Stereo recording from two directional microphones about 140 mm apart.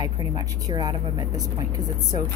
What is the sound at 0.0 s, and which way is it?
Speech, 25° right (ahead or behind).